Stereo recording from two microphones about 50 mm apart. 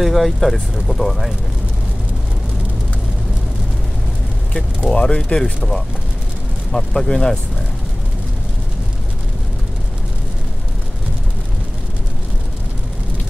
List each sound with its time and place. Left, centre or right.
0.0 s speech: centre
4.9 s speech: centre
6.7 s speech: centre